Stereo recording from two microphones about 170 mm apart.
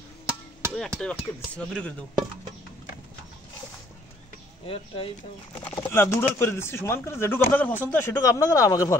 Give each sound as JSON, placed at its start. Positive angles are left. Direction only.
{"t": 0.3, "sound": "chop", "side_deg": -15}
{"t": 0.7, "sound": "speech", "side_deg": 5}
{"t": 5.5, "sound": "speech", "side_deg": 10}